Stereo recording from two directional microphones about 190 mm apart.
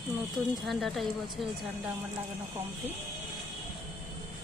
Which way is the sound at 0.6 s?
Centre (ahead or behind).